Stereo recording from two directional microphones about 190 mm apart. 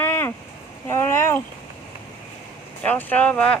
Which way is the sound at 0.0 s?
10° left (ahead or behind).